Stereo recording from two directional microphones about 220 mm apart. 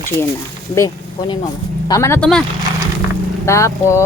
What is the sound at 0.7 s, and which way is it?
Speech, 15° left (ahead or behind).